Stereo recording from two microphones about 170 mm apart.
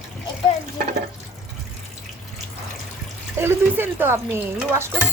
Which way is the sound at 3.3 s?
15° right (ahead or behind).